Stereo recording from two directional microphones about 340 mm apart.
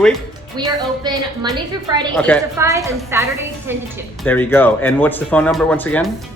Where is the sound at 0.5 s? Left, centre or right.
Centre.